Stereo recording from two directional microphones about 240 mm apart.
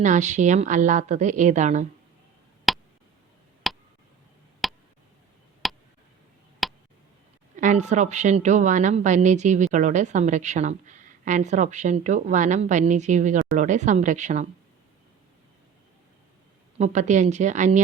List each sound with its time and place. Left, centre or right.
0.0 s a woman's voice: right
2.7 s a sound: centre
4.6 s tick: centre
5.6 s a sound: centre
7.5 s a woman's voice: right
16.7 s a woman's voice: right